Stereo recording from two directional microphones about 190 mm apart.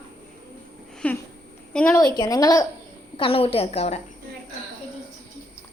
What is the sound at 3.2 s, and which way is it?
Speech, 30° left (ahead or behind).